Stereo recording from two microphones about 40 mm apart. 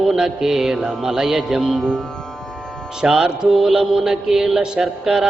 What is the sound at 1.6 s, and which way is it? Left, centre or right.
Speech, centre.